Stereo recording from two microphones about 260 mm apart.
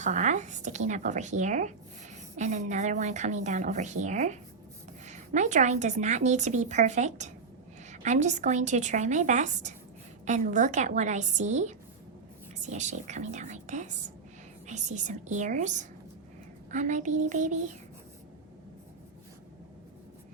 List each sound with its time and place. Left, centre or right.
0.0 s a woman's voice: right